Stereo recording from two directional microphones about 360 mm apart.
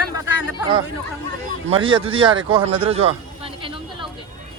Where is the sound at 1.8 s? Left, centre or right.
Centre.